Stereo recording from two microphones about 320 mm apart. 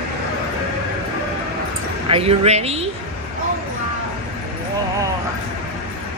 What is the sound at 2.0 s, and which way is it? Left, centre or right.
Speech, centre.